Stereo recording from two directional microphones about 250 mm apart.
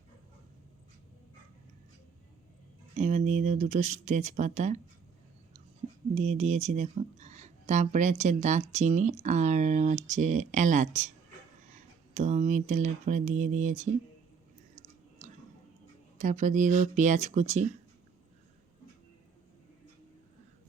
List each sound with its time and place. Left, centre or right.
2.9 s speech: right
6.1 s speech: right
16.1 s speech: right